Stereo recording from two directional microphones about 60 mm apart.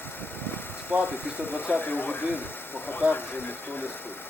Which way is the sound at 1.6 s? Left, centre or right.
Left.